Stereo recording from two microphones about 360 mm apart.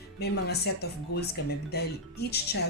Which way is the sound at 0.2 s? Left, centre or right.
Left.